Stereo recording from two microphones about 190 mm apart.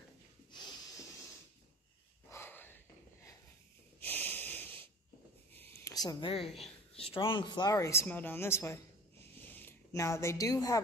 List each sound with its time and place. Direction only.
0.5 s snort: 25° left (ahead or behind)
2.3 s snort: 10° left (ahead or behind)
4.0 s wheeze: 10° left (ahead or behind)
5.6 s a sound: 15° left (ahead or behind)
7.0 s speech: 30° left (ahead or behind)
9.4 s a sound: 10° left (ahead or behind)